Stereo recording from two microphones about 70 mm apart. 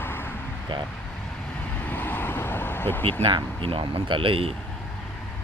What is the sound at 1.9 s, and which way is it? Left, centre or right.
Vehicle, left.